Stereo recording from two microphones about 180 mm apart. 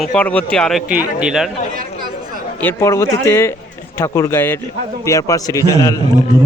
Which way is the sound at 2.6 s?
15° left (ahead or behind).